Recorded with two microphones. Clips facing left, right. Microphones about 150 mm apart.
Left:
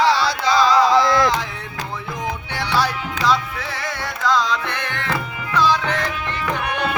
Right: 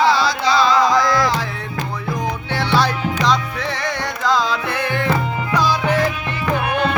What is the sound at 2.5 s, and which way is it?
Music, 10° left (ahead or behind).